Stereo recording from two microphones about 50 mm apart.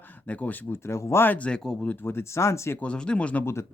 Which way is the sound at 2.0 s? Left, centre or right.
Left.